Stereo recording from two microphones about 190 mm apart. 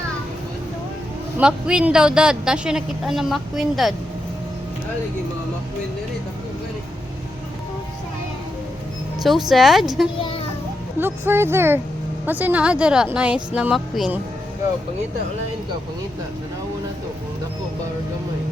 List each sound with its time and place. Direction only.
1.4 s a woman's voice: 5° right (ahead or behind)
9.2 s a woman's voice: centre (ahead or behind)
10.2 s a sound: 30° left (ahead or behind)
11.0 s a woman's voice: 10° right (ahead or behind)